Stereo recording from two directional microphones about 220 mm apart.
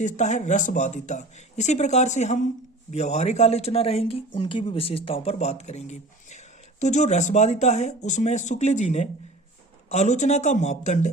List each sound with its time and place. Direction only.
0.0 s speech: 35° left (ahead or behind)